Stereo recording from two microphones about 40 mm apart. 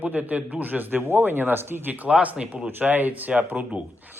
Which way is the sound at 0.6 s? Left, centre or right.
Right.